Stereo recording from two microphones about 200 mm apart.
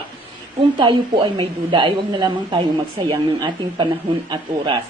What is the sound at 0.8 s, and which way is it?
Speech, 25° right (ahead or behind).